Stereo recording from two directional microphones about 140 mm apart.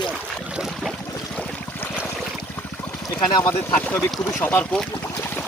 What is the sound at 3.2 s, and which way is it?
Speech, 30° left (ahead or behind).